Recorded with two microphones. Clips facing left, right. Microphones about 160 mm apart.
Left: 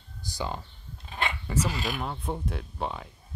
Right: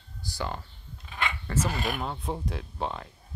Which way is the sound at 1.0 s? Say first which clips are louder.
Left 1 dB; 35° left (ahead or behind).